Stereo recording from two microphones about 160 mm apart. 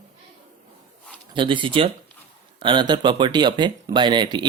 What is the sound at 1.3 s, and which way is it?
Speech, 30° right (ahead or behind).